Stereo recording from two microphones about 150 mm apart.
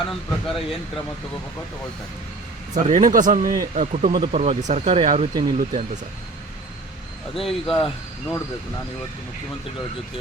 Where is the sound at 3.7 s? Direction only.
50° right (ahead or behind).